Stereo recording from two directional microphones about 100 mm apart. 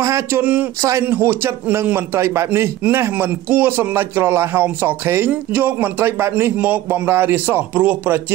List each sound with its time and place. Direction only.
0.0 s a man's voice: 25° right (ahead or behind)